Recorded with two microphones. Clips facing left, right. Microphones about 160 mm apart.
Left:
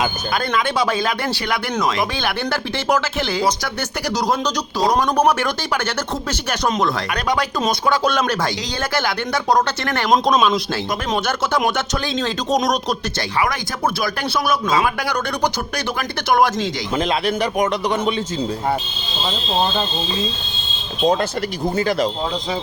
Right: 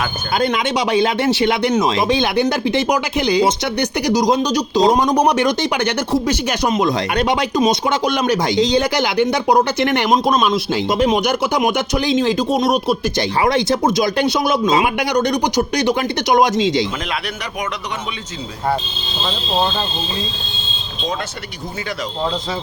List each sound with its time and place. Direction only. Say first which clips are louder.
0.3 s speech: right 3 dB; 20° right (ahead or behind)
7.1 s speech: right 4 dB; 25° right (ahead or behind); by 13.0 s 5° right (ahead or behind)
13.4 s speech: right 6 dB; 25° right (ahead or behind)